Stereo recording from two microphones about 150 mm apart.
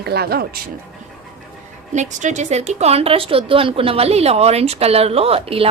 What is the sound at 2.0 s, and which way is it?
A woman's voice, 55° right (ahead or behind).